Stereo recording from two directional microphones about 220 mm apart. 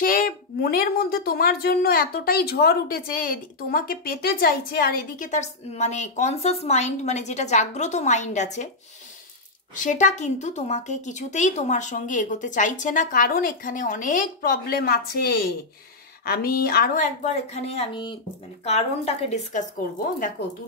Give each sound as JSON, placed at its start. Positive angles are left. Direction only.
{"t": 0.0, "sound": "a woman's voice", "side_deg": 40}
{"t": 9.8, "sound": "a woman's voice", "side_deg": 35}